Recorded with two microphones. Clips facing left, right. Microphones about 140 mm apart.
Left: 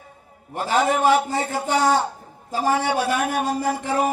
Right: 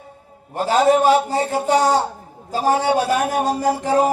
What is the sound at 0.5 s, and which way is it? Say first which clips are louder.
A man's voice: right 5 dB; 30° right (ahead or behind).